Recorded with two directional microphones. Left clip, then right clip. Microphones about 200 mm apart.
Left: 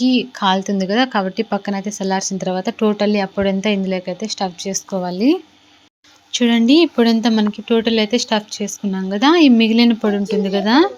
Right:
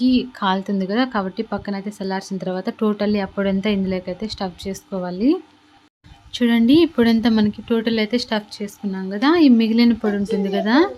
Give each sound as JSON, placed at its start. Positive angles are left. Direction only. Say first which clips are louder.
{"t": 0.0, "sound": "speech", "louder": "left 3 dB", "side_deg": 5}